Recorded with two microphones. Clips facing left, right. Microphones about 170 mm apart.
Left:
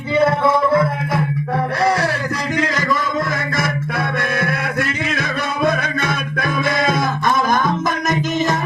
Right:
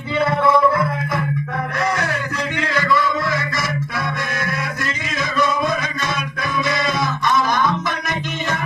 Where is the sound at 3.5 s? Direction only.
55° left (ahead or behind).